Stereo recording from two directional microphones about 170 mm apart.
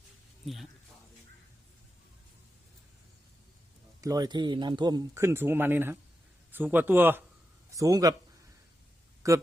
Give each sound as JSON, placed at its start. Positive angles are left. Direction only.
{"t": 0.4, "sound": "a man's voice", "side_deg": 0}
{"t": 4.0, "sound": "a man's voice", "side_deg": -20}
{"t": 9.2, "sound": "a man's voice", "side_deg": -20}